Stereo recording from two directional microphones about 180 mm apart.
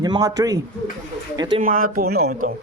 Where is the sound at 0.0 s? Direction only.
20° right (ahead or behind).